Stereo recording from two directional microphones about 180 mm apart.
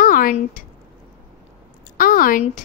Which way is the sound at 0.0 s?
50° left (ahead or behind).